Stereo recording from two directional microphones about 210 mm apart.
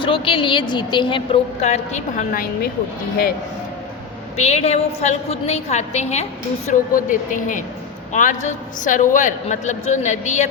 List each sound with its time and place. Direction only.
0.0 s a woman's voice: 25° left (ahead or behind)
4.4 s a man's voice: 30° left (ahead or behind)